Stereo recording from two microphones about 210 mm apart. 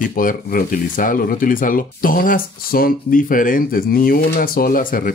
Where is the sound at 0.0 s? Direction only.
40° left (ahead or behind).